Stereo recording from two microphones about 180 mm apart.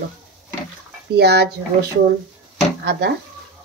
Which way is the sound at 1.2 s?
65° right (ahead or behind).